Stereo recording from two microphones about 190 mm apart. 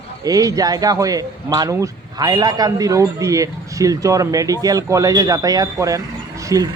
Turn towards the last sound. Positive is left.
turn(degrees=-15)  # may be behind; listen again after turning